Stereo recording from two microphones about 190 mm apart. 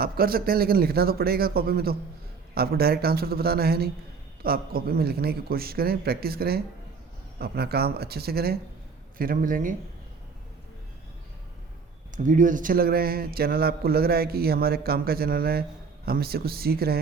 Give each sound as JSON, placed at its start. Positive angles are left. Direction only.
{"t": 0.0, "sound": "a man's voice", "side_deg": -50}
{"t": 12.1, "sound": "a man's voice", "side_deg": -40}